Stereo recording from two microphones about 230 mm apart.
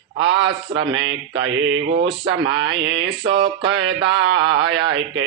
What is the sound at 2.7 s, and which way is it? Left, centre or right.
Speech, right.